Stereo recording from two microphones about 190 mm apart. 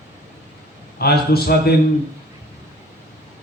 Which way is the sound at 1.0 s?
55° left (ahead or behind).